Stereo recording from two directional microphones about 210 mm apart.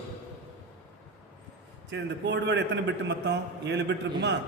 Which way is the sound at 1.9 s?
55° right (ahead or behind).